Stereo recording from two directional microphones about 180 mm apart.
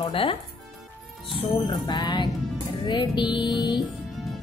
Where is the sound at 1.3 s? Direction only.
25° left (ahead or behind).